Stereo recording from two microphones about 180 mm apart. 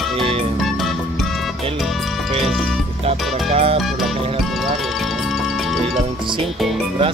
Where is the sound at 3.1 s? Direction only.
35° right (ahead or behind).